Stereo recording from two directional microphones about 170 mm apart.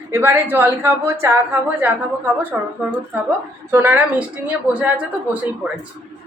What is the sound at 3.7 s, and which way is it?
A woman's voice, 10° right (ahead or behind).